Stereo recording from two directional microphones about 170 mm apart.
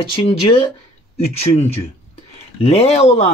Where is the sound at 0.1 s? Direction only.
35° left (ahead or behind).